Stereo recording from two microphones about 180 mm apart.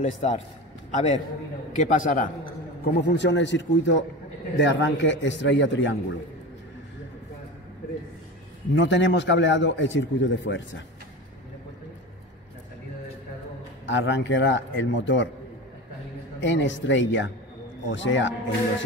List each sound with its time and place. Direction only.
0.0 s a man's voice: 40° left (ahead or behind)
2.8 s a man's voice: 70° left (ahead or behind); by 5.9 s 90° left
8.7 s a man's voice: 90° left
13.8 s a man's voice: 90° left
16.3 s a man's voice: 90° left